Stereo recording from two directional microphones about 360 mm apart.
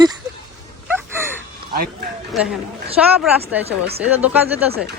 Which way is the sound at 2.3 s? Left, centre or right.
Centre.